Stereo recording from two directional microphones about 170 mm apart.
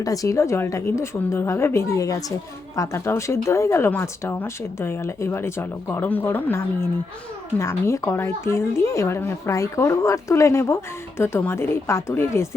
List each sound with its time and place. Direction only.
0.0 s speech: 20° left (ahead or behind)